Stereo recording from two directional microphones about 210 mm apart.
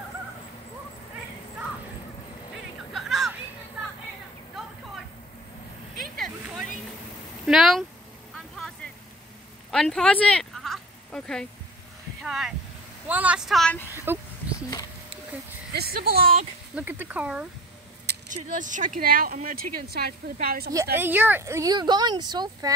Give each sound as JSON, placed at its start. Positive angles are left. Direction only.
{"t": 2.9, "sound": "a sound", "side_deg": 0}
{"t": 5.9, "sound": "vehicle", "side_deg": 0}
{"t": 7.4, "sound": "a woman's voice", "side_deg": 0}
{"t": 9.7, "sound": "a sound", "side_deg": 0}
{"t": 12.2, "sound": "a woman's voice", "side_deg": 0}
{"t": 15.7, "sound": "speech", "side_deg": -50}
{"t": 16.7, "sound": "speech", "side_deg": -10}
{"t": 18.3, "sound": "speech", "side_deg": -35}
{"t": 20.9, "sound": "speech", "side_deg": -10}